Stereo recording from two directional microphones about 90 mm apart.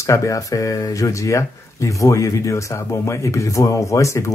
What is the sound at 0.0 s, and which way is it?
Speech, 35° left (ahead or behind).